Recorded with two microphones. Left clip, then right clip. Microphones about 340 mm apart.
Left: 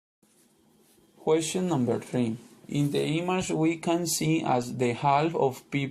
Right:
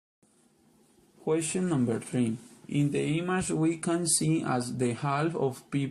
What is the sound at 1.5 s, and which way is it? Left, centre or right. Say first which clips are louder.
Speech: left 2 dB; left.